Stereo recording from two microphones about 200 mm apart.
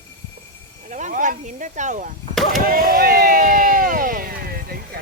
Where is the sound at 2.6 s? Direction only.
45° right (ahead or behind).